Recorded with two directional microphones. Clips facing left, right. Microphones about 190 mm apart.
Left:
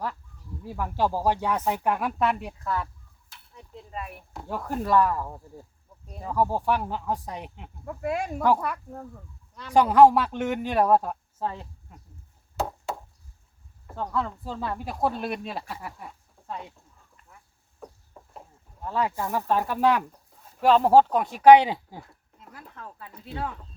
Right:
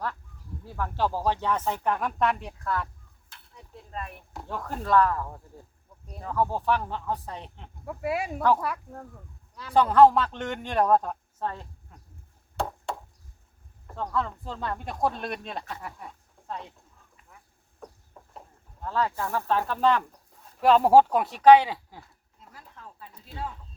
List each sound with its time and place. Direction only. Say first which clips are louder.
0.6 s speech: left 2 dB; 10° left (ahead or behind)
3.9 s speech: even; 5° left (ahead or behind)
7.9 s speech: left 1 dB; 5° right (ahead or behind)
8.4 s speech: left 1 dB; 10° left (ahead or behind)
8.6 s speech: left 1 dB; centre (ahead or behind)
9.7 s speech: left 1 dB; 10° left (ahead or behind)
12.5 s chop: left 1 dB; 5° left (ahead or behind)
13.8 s speech: left 1 dB; 5° left (ahead or behind)
17.7 s a sound: left 1 dB; 5° left (ahead or behind)
20.6 s speech: even; centre (ahead or behind)
21.4 s speech: left 2 dB; 20° left (ahead or behind)
22.5 s a sound: left 5 dB; 65° left (ahead or behind)